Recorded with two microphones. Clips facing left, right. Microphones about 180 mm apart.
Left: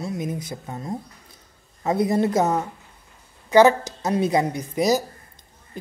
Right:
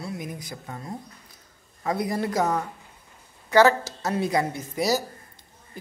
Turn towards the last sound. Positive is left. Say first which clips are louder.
# left 4 dB
turn(degrees=20)  # may be behind; listen again after turning